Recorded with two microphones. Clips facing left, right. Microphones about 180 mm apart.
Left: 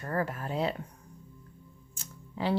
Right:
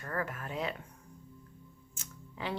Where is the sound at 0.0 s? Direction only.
35° left (ahead or behind).